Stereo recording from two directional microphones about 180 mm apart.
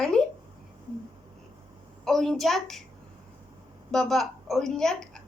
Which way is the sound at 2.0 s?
Centre (ahead or behind).